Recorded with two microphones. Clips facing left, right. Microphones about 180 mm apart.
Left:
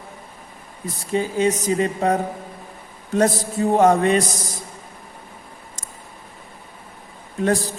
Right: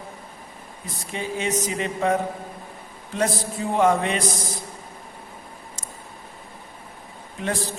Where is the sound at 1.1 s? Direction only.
40° left (ahead or behind).